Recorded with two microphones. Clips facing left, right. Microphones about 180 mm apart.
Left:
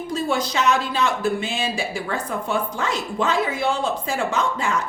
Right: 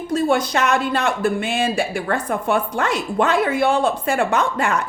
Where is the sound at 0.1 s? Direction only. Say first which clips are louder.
Right 6 dB; 55° right (ahead or behind).